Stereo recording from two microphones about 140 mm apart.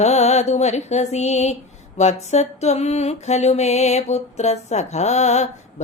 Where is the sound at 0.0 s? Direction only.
50° left (ahead or behind).